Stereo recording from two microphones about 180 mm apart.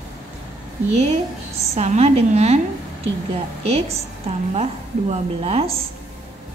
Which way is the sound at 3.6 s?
35° right (ahead or behind).